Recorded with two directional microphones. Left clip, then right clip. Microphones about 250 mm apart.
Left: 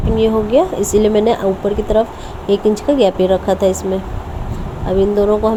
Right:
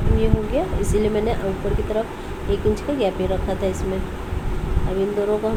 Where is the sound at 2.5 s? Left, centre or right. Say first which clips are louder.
Left 8 dB; left.